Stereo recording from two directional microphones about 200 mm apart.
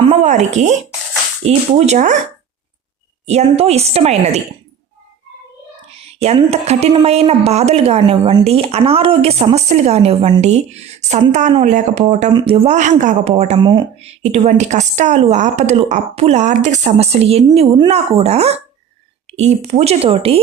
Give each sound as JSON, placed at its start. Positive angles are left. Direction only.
{"t": 0.1, "sound": "speech", "side_deg": -35}
{"t": 3.2, "sound": "speech", "side_deg": -30}
{"t": 6.1, "sound": "speech", "side_deg": -30}